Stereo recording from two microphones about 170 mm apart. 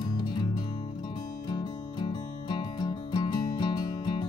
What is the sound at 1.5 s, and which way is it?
Music, 25° left (ahead or behind).